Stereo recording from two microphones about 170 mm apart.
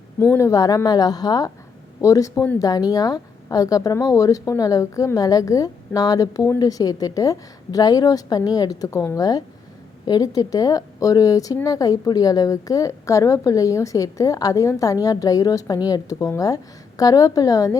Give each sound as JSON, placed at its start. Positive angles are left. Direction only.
{"t": 0.2, "sound": "a woman's voice", "side_deg": 15}